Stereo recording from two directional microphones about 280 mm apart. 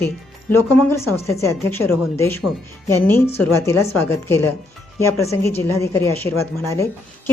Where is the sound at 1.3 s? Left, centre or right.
Centre.